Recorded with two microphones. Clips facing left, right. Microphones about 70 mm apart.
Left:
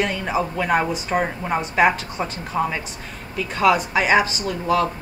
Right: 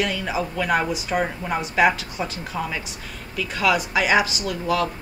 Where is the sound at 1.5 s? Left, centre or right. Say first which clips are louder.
Left 1 dB; left.